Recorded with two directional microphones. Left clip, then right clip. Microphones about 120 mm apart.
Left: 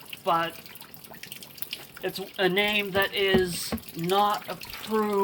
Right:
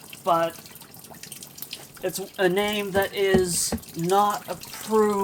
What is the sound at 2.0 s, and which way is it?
Speech, 45° right (ahead or behind).